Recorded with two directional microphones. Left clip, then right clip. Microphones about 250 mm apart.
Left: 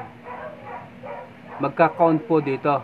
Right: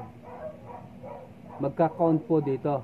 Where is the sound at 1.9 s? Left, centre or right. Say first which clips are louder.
Left 6 dB; left.